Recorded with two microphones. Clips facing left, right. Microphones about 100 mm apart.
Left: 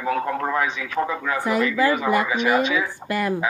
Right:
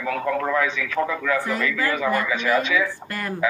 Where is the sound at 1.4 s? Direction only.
20° left (ahead or behind).